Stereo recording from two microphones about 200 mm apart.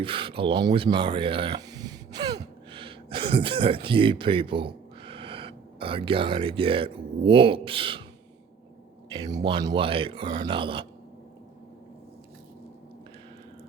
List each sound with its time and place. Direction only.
0.0 s speech: 25° right (ahead or behind)
9.1 s speech: 25° right (ahead or behind)